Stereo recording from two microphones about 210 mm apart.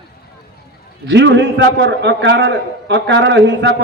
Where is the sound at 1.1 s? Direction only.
55° right (ahead or behind).